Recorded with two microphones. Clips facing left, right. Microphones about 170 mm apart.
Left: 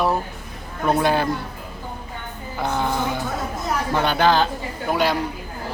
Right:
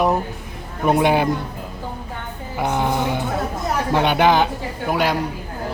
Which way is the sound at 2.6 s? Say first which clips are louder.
Right 2 dB; 15° right (ahead or behind).